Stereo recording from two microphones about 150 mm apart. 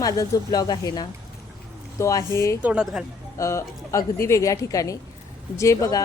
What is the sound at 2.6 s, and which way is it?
Speech, 5° right (ahead or behind).